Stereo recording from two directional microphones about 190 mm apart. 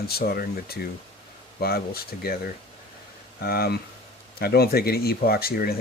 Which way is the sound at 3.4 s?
55° left (ahead or behind).